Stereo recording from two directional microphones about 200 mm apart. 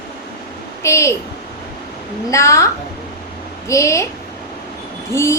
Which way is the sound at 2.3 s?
15° left (ahead or behind).